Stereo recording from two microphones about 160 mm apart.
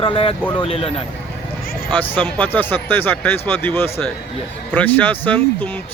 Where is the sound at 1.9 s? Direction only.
10° left (ahead or behind).